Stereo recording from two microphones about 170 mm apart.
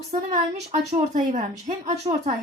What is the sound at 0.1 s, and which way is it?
A woman's voice, 40° right (ahead or behind).